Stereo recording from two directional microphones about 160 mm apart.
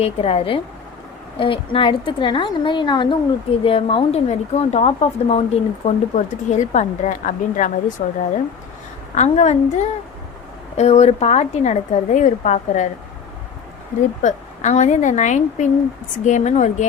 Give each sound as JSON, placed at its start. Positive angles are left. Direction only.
{"t": 0.0, "sound": "a woman's voice", "side_deg": 35}
{"t": 9.1, "sound": "a woman's voice", "side_deg": 45}
{"t": 14.2, "sound": "a woman's voice", "side_deg": 50}